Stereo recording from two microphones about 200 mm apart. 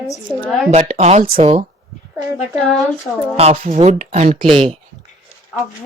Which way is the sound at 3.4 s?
30° right (ahead or behind).